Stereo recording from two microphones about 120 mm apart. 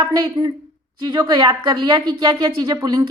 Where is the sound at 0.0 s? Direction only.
35° right (ahead or behind).